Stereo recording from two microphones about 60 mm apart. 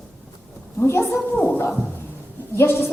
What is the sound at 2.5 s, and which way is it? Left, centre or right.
Speech, left.